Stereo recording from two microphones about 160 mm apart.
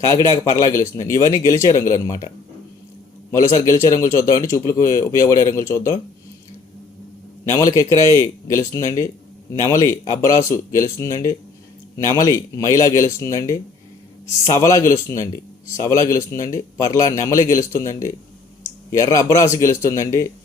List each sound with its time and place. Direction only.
0.0 s a man's voice: 20° left (ahead or behind)
3.3 s a man's voice: 20° left (ahead or behind)
7.5 s a man's voice: 20° left (ahead or behind)
18.6 s a man's voice: 20° left (ahead or behind)